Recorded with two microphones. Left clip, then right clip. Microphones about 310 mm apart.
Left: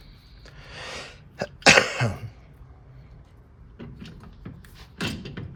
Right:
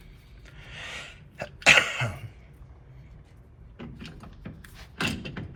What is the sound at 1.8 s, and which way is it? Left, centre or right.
Cough, centre.